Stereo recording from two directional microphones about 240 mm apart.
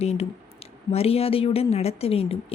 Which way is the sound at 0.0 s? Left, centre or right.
Left.